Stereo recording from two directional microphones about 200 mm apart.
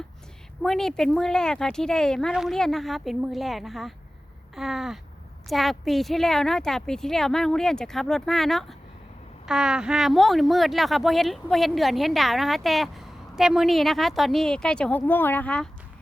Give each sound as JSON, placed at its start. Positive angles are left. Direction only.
{"t": 0.6, "sound": "speech", "side_deg": 0}